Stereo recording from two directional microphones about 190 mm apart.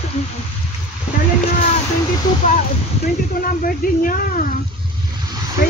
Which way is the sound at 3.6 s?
45° left (ahead or behind).